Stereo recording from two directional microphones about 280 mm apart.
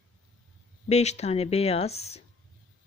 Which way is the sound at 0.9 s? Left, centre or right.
Left.